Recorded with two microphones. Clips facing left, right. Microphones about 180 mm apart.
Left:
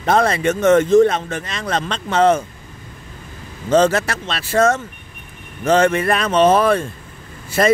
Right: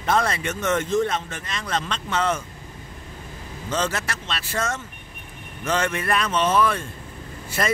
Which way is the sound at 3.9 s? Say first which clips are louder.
Left 8 dB; 80° left.